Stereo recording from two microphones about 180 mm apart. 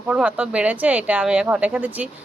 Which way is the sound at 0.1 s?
5° right (ahead or behind).